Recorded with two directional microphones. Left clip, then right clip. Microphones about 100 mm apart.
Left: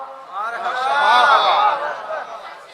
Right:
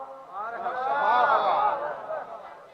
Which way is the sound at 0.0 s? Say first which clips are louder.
Left 7 dB; 35° left (ahead or behind).